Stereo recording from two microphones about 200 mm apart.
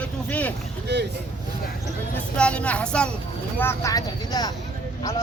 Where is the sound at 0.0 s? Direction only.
5° left (ahead or behind).